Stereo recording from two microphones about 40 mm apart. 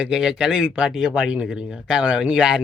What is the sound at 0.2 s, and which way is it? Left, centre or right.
Speech, centre.